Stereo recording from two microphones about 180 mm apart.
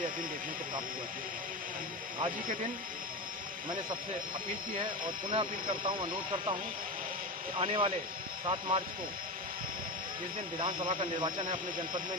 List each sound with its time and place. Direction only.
4.7 s speech: 25° right (ahead or behind)
10.6 s speech: 25° right (ahead or behind)